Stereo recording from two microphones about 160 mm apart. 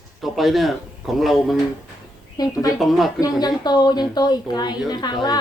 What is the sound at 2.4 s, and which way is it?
Speech, 25° left (ahead or behind).